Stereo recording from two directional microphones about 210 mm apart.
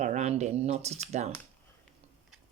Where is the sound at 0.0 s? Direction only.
35° right (ahead or behind).